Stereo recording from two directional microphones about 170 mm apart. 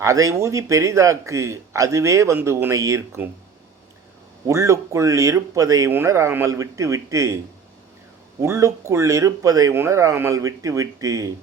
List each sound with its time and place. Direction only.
0.0 s a man's voice: 20° right (ahead or behind)
4.4 s a man's voice: 20° right (ahead or behind)
8.4 s speech: 15° right (ahead or behind)